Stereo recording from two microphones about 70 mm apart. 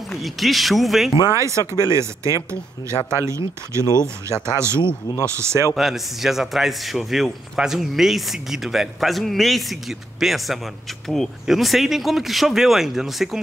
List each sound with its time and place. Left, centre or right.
0.1 s a man's voice: centre
1.3 s speech: right
5.8 s a man's voice: centre